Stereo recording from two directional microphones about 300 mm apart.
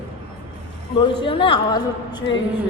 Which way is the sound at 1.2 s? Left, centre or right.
Centre.